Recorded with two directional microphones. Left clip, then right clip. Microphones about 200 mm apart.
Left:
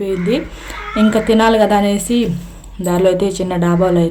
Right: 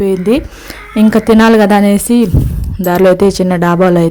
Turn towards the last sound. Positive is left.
turn(degrees=-45)  # may be behind; listen again after turning